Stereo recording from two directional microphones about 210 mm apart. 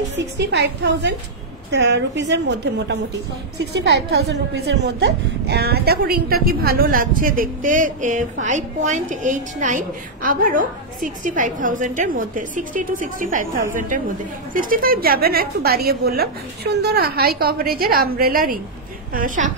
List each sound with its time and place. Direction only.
0.1 s a woman's voice: 55° right (ahead or behind); by 19.5 s 40° right (ahead or behind)